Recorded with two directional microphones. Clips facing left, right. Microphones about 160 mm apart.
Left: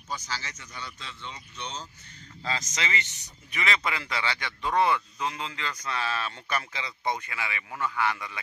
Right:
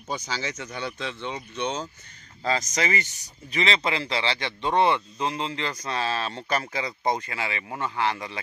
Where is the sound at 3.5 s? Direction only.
30° right (ahead or behind).